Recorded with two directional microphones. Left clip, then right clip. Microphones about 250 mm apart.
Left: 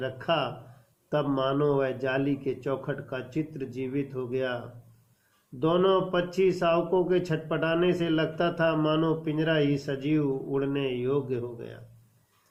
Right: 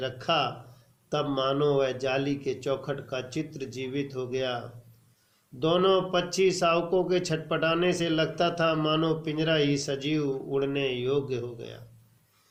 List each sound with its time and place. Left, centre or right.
0.0 s a man's voice: left